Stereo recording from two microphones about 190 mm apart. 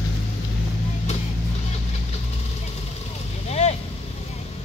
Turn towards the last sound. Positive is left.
turn(degrees=35)  # may be behind; listen again after turning